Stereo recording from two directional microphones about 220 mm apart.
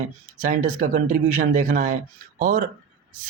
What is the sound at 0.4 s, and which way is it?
Speech, 35° right (ahead or behind).